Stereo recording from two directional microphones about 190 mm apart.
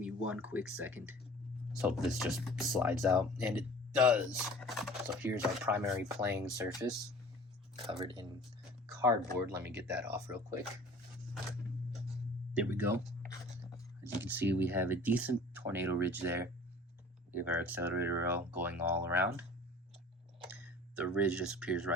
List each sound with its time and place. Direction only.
0.0 s speech: 5° right (ahead or behind); by 8.3 s 25° right (ahead or behind)
9.0 s speech: 15° right (ahead or behind)
12.5 s speech: 10° right (ahead or behind)
20.5 s speech: 10° right (ahead or behind)